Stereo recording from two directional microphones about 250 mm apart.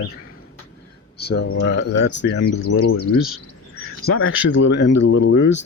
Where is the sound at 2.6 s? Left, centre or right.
Left.